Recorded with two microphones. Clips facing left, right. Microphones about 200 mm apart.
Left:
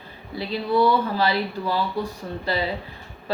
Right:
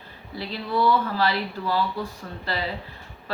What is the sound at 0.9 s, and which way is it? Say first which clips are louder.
Speech: left 1 dB; 15° left (ahead or behind).